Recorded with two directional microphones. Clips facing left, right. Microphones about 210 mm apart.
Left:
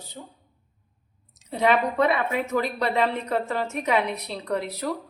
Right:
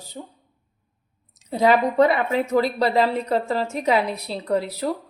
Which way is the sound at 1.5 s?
35° right (ahead or behind).